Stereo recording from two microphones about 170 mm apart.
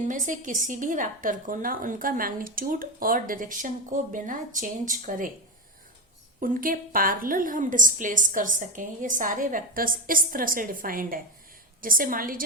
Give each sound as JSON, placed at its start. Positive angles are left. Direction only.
{"t": 0.0, "sound": "a woman's voice", "side_deg": -50}
{"t": 6.4, "sound": "a woman's voice", "side_deg": -55}